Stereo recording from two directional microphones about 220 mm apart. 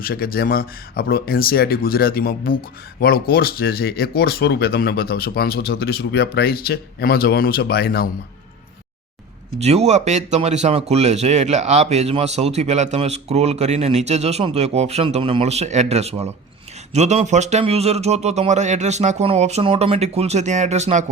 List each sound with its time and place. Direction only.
0.0 s speech: 40° left (ahead or behind)
9.6 s speech: 30° right (ahead or behind)